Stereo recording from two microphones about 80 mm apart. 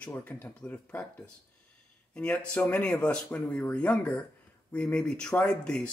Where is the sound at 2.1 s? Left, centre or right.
Centre.